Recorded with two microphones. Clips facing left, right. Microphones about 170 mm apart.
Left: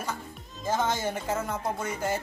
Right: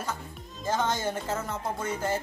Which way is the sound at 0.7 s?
10° left (ahead or behind).